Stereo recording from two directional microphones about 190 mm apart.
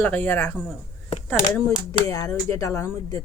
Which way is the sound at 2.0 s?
15° left (ahead or behind).